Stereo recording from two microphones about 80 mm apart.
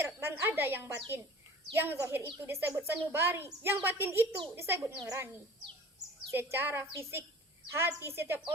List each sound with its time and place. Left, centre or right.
0.0 s a woman's voice: right
6.3 s a woman's voice: right